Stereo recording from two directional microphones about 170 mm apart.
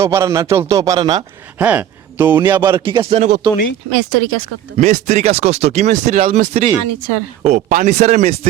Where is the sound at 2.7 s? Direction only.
30° right (ahead or behind).